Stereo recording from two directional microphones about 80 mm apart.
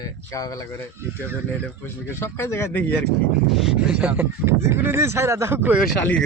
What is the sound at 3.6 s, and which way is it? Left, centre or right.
Speech, centre.